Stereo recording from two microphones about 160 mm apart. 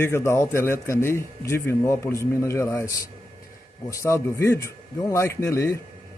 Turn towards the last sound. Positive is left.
turn(degrees=20)  # may be behind; listen again after turning